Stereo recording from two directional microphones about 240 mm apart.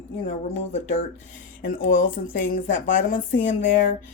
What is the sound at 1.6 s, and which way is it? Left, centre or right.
Speech, left.